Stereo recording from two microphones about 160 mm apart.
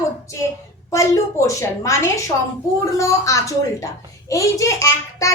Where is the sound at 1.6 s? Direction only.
20° left (ahead or behind).